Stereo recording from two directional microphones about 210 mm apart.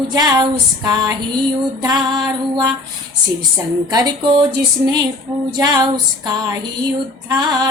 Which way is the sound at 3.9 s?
20° right (ahead or behind).